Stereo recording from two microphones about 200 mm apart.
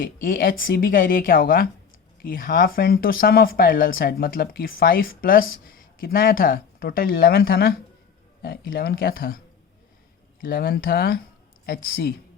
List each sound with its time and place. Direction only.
0.0 s speech: 45° left (ahead or behind)
10.4 s speech: 45° left (ahead or behind)